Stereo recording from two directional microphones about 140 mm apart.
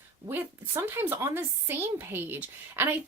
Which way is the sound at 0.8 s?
15° right (ahead or behind).